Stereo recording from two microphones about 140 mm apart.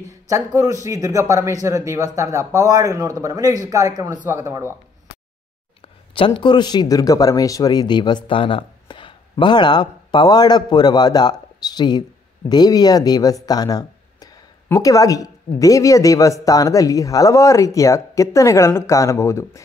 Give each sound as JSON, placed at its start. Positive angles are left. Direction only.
{"t": 0.1, "sound": "a man's voice", "side_deg": -25}
{"t": 5.8, "sound": "speech", "side_deg": 40}